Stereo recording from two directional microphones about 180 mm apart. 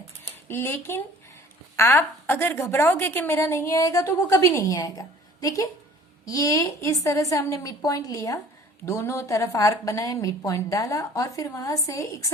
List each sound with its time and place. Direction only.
0.4 s a woman's voice: 15° left (ahead or behind)